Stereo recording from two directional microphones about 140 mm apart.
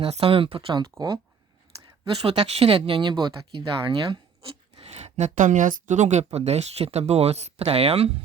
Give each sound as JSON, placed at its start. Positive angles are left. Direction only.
{"t": 0.0, "sound": "speech", "side_deg": -45}
{"t": 2.2, "sound": "speech", "side_deg": -45}